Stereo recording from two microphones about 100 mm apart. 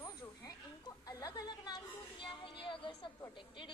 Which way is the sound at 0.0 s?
40° left (ahead or behind).